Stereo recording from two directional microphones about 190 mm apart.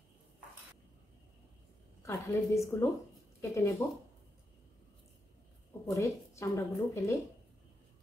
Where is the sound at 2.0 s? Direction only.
15° left (ahead or behind).